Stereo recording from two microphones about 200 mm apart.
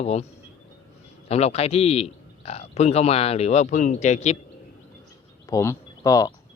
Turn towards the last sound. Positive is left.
turn(degrees=15)  # may be behind; listen again after turning